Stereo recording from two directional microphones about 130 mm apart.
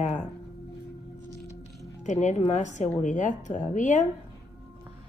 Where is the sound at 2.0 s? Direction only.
65° left (ahead or behind).